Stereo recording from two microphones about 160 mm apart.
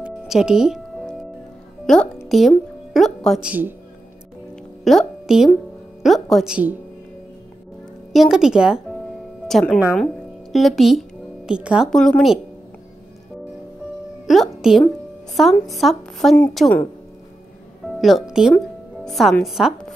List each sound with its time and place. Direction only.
0.0 s music: 5° right (ahead or behind)
1.9 s speech: 5° left (ahead or behind)
4.8 s a woman's voice: centre (ahead or behind)
8.1 s speech: centre (ahead or behind)
14.2 s a woman's voice: centre (ahead or behind)
17.8 s speech: centre (ahead or behind)